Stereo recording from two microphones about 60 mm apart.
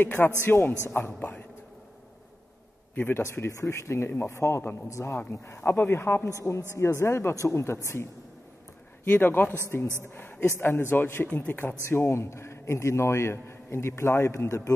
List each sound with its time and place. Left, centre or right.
0.0 s a man's voice: left
2.9 s a sound: left
3.2 s a man's voice: left
6.7 s a man's voice: left
9.1 s a man's voice: left
12.1 s a man's voice: left